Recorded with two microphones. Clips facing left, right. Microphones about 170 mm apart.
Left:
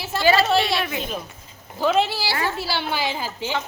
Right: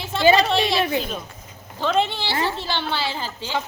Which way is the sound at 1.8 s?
5° left (ahead or behind).